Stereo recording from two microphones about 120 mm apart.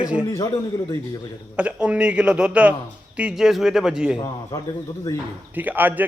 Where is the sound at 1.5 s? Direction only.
10° right (ahead or behind).